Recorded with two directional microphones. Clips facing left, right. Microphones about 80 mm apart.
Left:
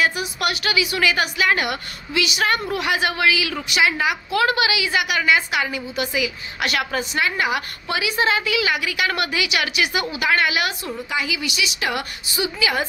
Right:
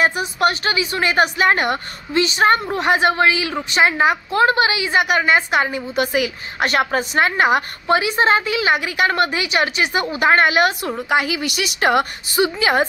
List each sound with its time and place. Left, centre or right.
0.0 s a woman's voice: right